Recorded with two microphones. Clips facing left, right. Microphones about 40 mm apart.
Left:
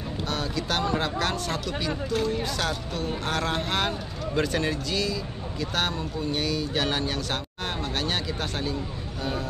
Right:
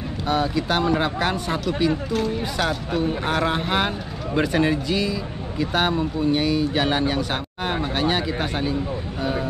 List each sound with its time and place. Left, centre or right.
0.3 s speech: centre